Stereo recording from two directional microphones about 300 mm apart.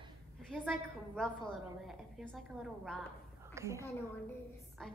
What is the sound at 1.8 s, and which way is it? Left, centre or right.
A woman's voice, centre.